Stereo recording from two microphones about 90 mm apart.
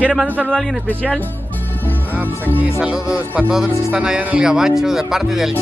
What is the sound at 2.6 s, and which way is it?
Speech, 10° right (ahead or behind).